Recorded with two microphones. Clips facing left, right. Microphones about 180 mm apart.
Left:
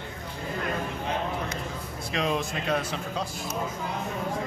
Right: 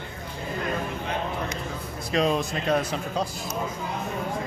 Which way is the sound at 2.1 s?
40° right (ahead or behind).